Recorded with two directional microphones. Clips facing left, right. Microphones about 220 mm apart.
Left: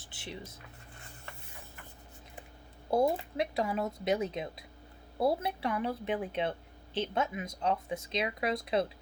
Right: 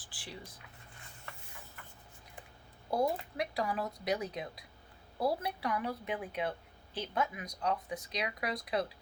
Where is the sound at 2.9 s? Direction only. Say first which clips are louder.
Left 4 dB; 25° left (ahead or behind).